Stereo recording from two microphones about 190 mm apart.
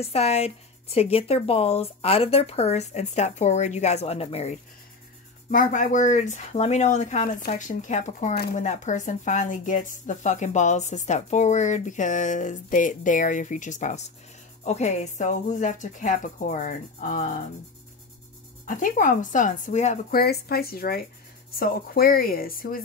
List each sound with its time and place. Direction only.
0.0 s speech: 35° left (ahead or behind)
5.5 s speech: 45° left (ahead or behind)
18.7 s speech: 45° left (ahead or behind)
20.2 s speech: 55° left (ahead or behind)